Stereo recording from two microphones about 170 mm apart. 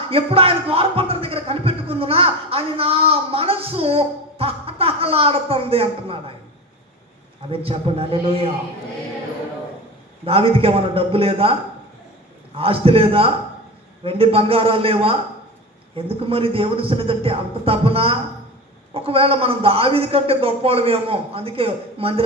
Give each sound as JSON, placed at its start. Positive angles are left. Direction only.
{"t": 0.1, "sound": "speech", "side_deg": -35}
{"t": 7.5, "sound": "speech", "side_deg": -35}
{"t": 10.2, "sound": "speech", "side_deg": -35}
{"t": 12.5, "sound": "speech", "side_deg": -35}